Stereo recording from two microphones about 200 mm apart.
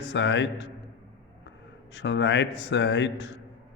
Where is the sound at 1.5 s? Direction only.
60° left (ahead or behind).